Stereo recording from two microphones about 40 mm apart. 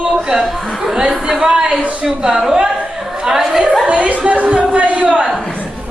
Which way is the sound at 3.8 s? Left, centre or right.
Right.